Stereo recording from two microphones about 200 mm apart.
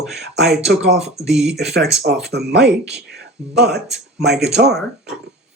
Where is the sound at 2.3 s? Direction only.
55° right (ahead or behind).